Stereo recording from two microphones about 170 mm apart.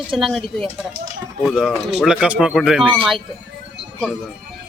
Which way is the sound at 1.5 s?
Centre (ahead or behind).